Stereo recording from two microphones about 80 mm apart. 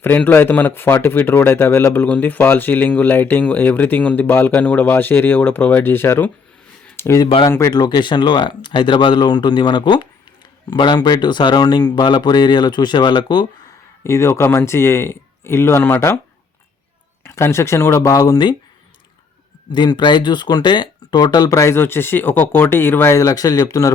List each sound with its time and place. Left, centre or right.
0.2 s speech: left
6.9 s a sound: left
7.7 s speech: left
14.0 s speech: left
17.2 s speech: left
18.0 s speech: left
19.7 s speech: left
21.6 s speech: left
23.1 s speech: left